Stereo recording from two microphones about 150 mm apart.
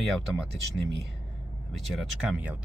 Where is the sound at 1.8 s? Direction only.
5° right (ahead or behind).